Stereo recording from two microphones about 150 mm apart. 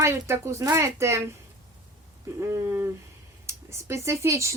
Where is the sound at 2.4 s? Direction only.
15° right (ahead or behind).